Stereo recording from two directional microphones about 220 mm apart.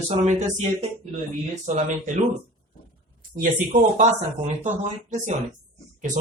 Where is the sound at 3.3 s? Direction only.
35° right (ahead or behind).